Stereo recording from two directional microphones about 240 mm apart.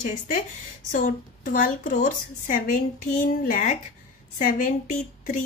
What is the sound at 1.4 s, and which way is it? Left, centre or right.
A woman's voice, left.